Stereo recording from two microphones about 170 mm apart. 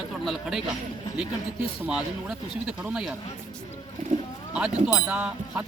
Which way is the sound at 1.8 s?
5° right (ahead or behind).